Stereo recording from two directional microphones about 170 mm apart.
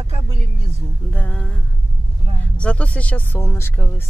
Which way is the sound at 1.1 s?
10° left (ahead or behind).